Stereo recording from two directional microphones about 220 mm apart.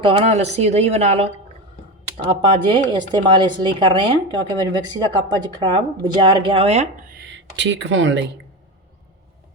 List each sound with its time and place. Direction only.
0.0 s speech: 25° right (ahead or behind)
2.4 s speech: 20° right (ahead or behind)
7.1 s speech: 55° right (ahead or behind)